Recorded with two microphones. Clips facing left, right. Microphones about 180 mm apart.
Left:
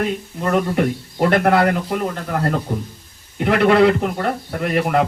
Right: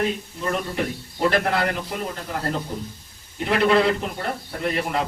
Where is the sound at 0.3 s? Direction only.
55° left (ahead or behind).